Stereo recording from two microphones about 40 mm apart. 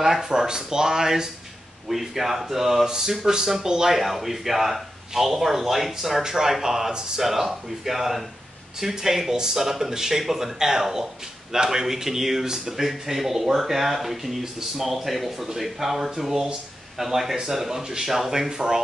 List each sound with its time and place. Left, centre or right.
0.0 s speech: centre
6.9 s speech: centre
7.2 s speech: centre
18.5 s speech: centre